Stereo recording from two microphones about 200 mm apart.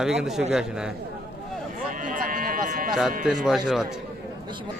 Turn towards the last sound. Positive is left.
turn(degrees=0)  # may be behind; listen again after turning